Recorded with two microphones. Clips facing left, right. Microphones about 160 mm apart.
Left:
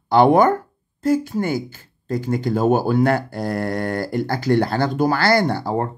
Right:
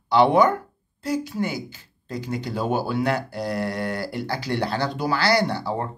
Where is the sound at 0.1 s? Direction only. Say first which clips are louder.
Left 3 dB; 50° left (ahead or behind).